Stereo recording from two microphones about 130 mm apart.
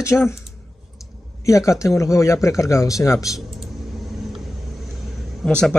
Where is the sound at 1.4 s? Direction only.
25° left (ahead or behind).